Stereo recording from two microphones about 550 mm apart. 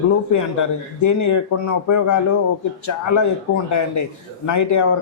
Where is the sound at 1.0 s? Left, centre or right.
Left.